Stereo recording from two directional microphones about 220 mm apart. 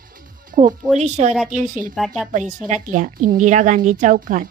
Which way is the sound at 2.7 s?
35° right (ahead or behind).